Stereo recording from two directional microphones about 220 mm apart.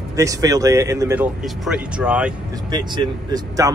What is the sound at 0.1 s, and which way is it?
Speech, 15° right (ahead or behind).